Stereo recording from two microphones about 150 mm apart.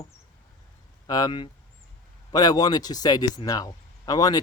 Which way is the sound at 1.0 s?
25° left (ahead or behind).